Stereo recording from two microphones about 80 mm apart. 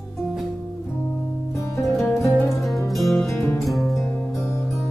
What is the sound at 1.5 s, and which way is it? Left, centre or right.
Music, left.